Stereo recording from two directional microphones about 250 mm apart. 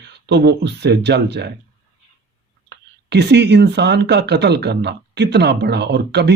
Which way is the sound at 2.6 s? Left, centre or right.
Right.